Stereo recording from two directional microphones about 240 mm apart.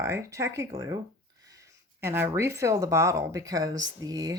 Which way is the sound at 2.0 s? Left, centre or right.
Centre.